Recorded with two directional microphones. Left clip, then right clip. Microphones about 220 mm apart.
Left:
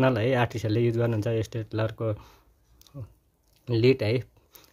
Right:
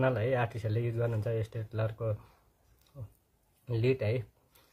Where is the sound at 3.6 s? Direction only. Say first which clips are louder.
Left 8 dB; 45° left (ahead or behind).